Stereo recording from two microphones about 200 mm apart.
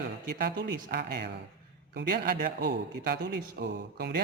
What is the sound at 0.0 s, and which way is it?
A man's voice, 50° right (ahead or behind).